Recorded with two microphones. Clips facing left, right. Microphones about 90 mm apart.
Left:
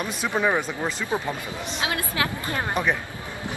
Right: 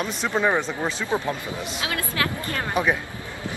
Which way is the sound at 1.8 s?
20° left (ahead or behind).